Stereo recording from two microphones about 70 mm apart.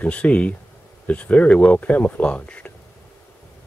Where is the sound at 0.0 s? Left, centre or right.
Centre.